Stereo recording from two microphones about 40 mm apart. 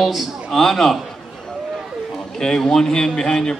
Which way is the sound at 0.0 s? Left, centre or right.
Centre.